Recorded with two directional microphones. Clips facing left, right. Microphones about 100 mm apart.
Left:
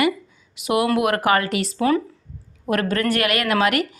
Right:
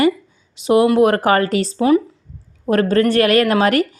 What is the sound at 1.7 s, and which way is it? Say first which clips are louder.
Speech: right 5 dB; 20° right (ahead or behind).